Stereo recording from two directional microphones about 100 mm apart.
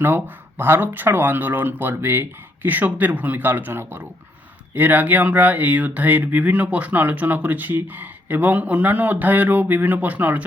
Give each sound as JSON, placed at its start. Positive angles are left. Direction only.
{"t": 0.0, "sound": "speech", "side_deg": -20}